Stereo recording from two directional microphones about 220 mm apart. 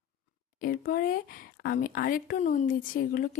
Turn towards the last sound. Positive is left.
turn(degrees=40)  # may be behind; listen again after turning